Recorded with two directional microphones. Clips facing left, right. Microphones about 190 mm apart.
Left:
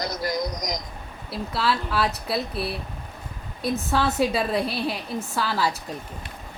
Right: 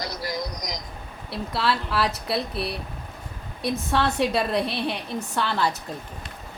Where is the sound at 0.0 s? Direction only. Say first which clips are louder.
Left 3 dB; 45° left (ahead or behind).